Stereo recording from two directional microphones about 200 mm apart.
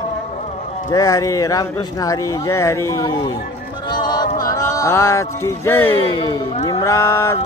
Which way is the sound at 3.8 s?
20° left (ahead or behind).